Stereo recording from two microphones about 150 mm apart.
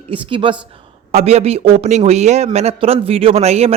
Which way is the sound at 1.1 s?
45° right (ahead or behind).